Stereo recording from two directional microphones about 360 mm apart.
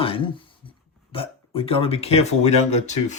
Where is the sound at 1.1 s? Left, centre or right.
Centre.